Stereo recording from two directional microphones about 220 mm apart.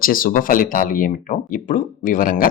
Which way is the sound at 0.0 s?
40° left (ahead or behind).